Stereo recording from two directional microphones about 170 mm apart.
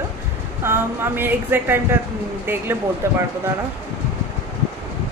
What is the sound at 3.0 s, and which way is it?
Speech, 15° right (ahead or behind).